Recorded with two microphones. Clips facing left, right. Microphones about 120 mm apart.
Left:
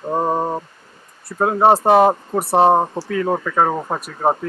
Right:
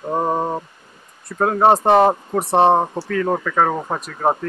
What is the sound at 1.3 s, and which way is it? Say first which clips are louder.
Speech: left 1 dB; 10° left (ahead or behind).